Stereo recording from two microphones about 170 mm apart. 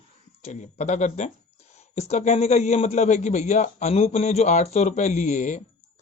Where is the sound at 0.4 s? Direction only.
45° left (ahead or behind).